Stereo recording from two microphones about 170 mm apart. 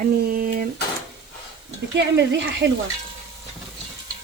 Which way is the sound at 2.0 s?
90° right.